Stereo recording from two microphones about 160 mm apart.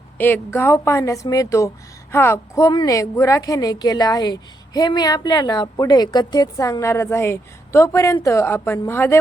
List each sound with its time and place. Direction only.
0.2 s a woman's voice: 10° left (ahead or behind)